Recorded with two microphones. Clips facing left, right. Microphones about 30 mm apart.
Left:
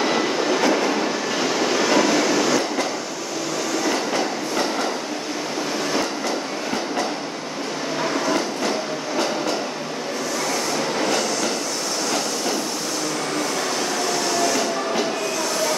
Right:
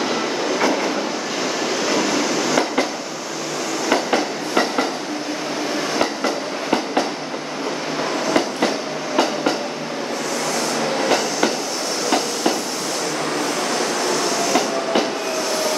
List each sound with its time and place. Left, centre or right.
1.8 s train: centre
3.9 s train: right